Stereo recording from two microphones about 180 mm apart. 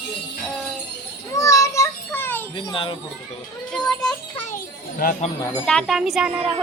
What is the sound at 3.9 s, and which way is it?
Speech, 5° left (ahead or behind).